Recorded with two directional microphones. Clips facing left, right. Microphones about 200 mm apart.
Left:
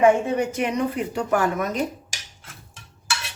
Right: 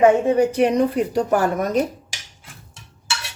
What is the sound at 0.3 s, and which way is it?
Speech, 35° right (ahead or behind).